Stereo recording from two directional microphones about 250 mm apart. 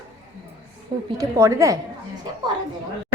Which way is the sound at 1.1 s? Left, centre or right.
Centre.